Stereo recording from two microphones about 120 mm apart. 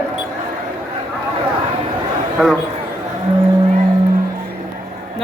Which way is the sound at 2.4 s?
Centre (ahead or behind).